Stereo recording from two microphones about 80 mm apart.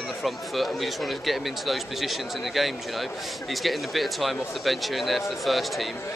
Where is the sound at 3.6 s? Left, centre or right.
Centre.